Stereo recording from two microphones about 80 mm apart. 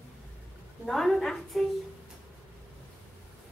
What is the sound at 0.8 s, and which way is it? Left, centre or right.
Child singing, centre.